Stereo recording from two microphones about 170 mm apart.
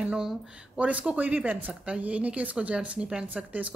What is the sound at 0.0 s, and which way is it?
Speech, 5° right (ahead or behind).